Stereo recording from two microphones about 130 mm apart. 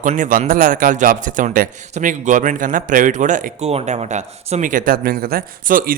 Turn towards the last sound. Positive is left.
turn(degrees=-90)